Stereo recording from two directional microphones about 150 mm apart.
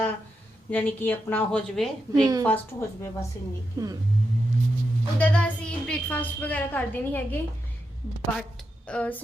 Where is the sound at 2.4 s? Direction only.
15° left (ahead or behind).